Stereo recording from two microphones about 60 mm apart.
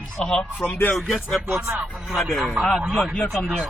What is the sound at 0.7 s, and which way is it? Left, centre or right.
Music, left.